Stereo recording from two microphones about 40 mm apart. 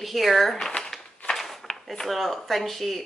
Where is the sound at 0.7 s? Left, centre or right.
Left.